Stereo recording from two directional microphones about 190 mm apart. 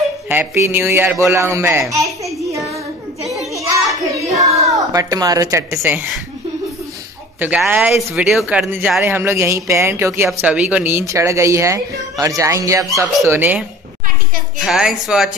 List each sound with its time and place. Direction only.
0.3 s speech: 10° right (ahead or behind)
3.3 s children playing: centre (ahead or behind)
4.2 s speech: 15° right (ahead or behind)
7.3 s a child's voice: 5° right (ahead or behind)